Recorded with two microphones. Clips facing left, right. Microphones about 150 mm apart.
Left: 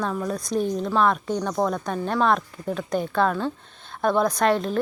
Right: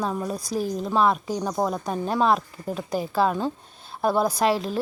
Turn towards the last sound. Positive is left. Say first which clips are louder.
# left 1 dB
turn(degrees=-5)  # may be behind; listen again after turning